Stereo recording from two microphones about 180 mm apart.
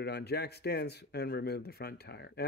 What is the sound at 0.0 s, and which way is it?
Speech, 65° left (ahead or behind).